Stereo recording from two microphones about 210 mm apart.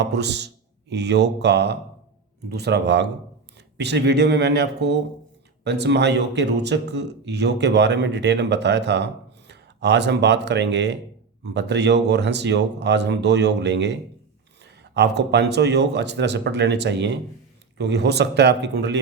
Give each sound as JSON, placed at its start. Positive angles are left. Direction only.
{"t": 0.0, "sound": "speech", "side_deg": -55}